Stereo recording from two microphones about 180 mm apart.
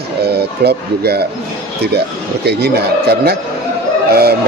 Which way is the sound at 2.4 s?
65° right (ahead or behind).